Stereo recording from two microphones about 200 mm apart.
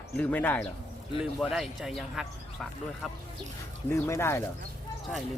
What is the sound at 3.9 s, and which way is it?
Speech, 15° left (ahead or behind).